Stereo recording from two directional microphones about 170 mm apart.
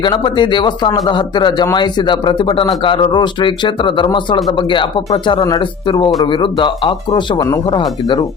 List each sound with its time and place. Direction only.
0.0 s speech: 25° left (ahead or behind)